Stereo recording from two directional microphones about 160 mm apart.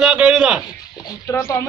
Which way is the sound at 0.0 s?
5° right (ahead or behind).